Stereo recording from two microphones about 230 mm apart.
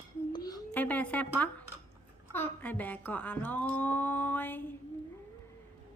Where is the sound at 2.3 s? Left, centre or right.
Centre.